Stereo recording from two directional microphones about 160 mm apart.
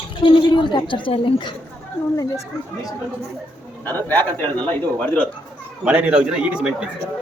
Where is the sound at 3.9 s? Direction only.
10° left (ahead or behind).